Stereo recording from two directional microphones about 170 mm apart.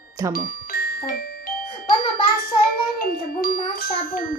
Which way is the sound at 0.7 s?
60° left (ahead or behind).